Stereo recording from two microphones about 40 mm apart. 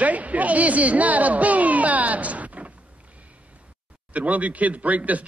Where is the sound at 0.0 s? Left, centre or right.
Right.